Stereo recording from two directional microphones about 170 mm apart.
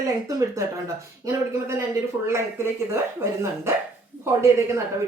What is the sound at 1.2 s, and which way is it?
Speech, 15° right (ahead or behind).